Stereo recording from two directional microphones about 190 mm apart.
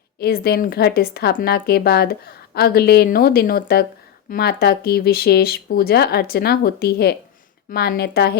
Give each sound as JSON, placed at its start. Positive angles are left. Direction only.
{"t": 0.2, "sound": "a woman's voice", "side_deg": 55}